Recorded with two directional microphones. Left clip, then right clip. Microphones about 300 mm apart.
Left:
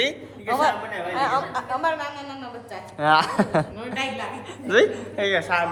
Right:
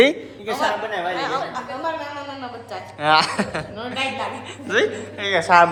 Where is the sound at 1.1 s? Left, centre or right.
Left.